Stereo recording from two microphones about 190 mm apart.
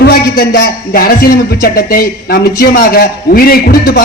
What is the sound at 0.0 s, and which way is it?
A man's voice, 55° left (ahead or behind).